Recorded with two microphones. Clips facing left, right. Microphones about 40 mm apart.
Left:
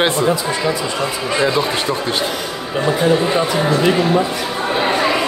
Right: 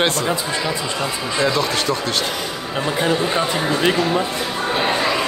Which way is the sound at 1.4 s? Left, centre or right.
Centre.